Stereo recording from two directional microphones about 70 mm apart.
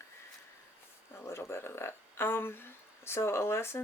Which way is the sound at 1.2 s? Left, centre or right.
Left.